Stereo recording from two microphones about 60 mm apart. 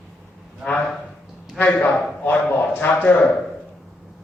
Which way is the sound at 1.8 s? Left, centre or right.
Left.